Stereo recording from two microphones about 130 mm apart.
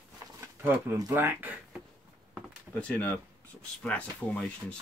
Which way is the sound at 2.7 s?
10° left (ahead or behind).